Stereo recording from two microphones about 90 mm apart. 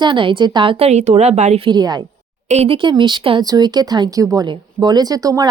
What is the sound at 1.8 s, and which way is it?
Speech, 50° right (ahead or behind).